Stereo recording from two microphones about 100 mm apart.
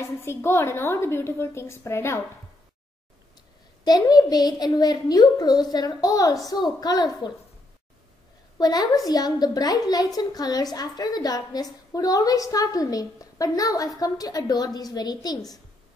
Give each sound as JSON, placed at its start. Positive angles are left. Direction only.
{"t": 0.0, "sound": "a woman's voice", "side_deg": 25}
{"t": 3.8, "sound": "a woman's voice", "side_deg": 40}
{"t": 8.5, "sound": "a woman's voice", "side_deg": 40}